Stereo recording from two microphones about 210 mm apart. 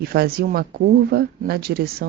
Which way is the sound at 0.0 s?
45° right (ahead or behind).